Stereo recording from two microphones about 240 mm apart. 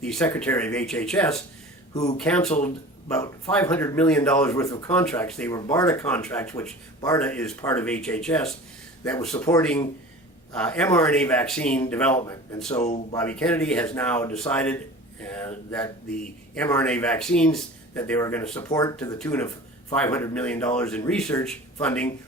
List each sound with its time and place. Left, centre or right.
0.0 s a man's voice: centre
1.9 s speech: centre
2.1 s a man's voice: centre
12.8 s speech: left
13.1 s a man's voice: centre